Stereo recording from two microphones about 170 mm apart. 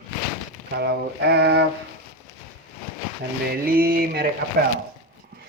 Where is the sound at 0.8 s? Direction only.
85° right.